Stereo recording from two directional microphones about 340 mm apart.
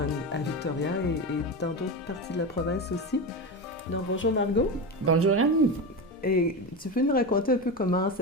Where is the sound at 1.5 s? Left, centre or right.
Left.